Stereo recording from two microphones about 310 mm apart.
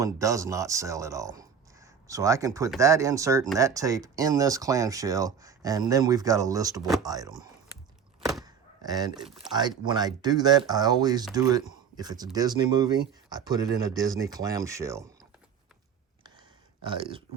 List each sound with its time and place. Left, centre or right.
0.0 s speech: centre
8.4 s a sound: centre
9.5 s speech: centre
16.8 s speech: centre